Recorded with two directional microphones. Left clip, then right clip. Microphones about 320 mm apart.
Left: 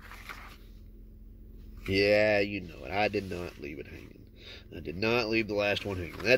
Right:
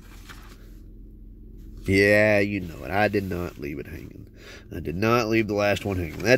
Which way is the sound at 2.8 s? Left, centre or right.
Right.